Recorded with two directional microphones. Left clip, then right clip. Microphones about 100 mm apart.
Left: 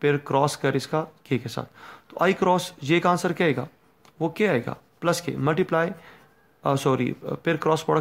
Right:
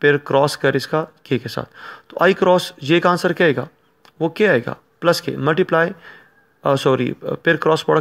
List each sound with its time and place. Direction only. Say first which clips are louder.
0.0 s speech: right 7 dB; 40° right (ahead or behind)